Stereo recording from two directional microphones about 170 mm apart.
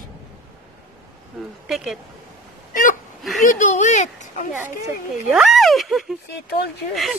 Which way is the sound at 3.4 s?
45° left (ahead or behind).